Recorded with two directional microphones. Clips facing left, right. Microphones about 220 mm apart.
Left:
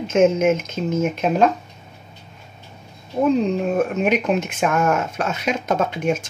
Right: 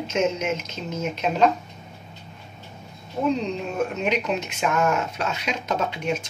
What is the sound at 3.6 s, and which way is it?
Speech, 50° left (ahead or behind).